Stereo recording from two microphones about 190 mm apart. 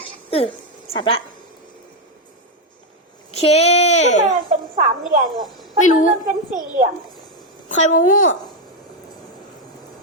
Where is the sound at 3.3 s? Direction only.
35° left (ahead or behind).